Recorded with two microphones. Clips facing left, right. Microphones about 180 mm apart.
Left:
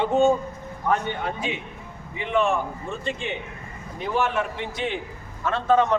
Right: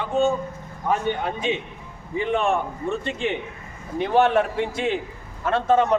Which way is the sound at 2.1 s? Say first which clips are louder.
Right 1 dB; 45° right (ahead or behind).